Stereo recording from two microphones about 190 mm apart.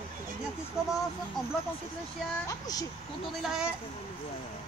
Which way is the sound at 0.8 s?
5° right (ahead or behind).